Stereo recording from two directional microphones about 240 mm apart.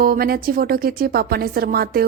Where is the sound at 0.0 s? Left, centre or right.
Right.